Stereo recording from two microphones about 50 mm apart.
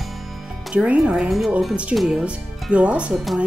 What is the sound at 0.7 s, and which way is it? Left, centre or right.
Speech, right.